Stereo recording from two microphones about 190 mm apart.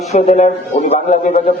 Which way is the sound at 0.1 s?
35° left (ahead or behind).